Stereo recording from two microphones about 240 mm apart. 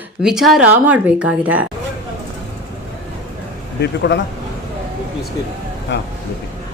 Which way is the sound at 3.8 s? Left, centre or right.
Left.